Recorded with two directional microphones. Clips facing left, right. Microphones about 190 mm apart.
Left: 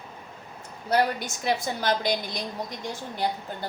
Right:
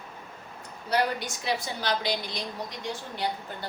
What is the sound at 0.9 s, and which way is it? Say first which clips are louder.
A woman's voice: left 3 dB; 50° left (ahead or behind).